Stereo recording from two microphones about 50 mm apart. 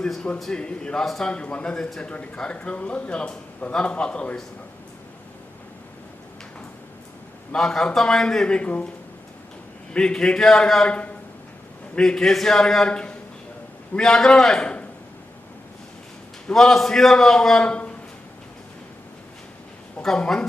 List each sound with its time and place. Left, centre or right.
0.5 s a man's voice: centre
1.0 s speech: centre
1.3 s a man's voice: left
7.5 s a man's voice: centre
9.9 s a man's voice: centre
10.8 s a man's voice: left
11.9 s a man's voice: centre
14.6 s speech: left
16.5 s a man's voice: centre
17.6 s a man's voice: left
20.0 s a man's voice: centre